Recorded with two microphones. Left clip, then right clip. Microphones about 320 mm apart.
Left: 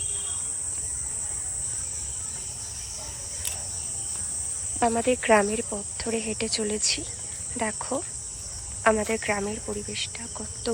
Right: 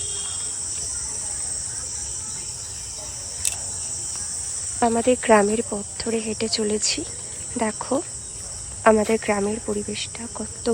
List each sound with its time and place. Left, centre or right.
4.8 s speech: centre